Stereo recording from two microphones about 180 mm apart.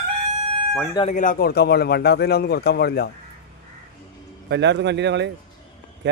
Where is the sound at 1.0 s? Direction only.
45° left (ahead or behind); by 3.1 s 65° left (ahead or behind).